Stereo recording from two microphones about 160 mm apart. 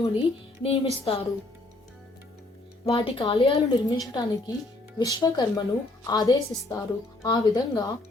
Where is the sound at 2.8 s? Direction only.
35° left (ahead or behind).